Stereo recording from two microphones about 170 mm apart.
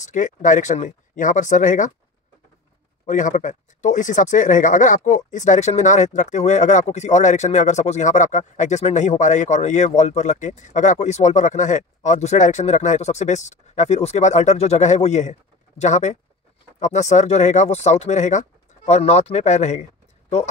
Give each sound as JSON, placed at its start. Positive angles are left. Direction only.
{"t": 0.0, "sound": "speech", "side_deg": 50}
{"t": 3.1, "sound": "speech", "side_deg": 50}